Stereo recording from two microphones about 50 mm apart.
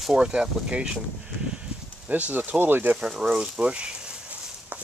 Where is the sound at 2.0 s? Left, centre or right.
Right.